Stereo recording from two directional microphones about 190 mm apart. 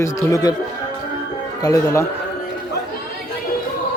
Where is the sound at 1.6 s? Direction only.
15° left (ahead or behind).